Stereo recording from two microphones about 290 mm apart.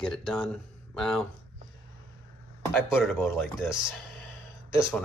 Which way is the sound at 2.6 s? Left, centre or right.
Centre.